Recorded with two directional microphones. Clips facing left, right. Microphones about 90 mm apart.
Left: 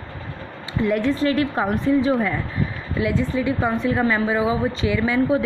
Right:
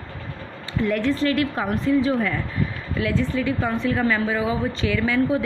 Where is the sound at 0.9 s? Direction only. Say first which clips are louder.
Left 2 dB; 15° left (ahead or behind).